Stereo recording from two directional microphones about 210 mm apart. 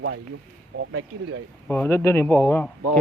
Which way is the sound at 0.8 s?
80° right.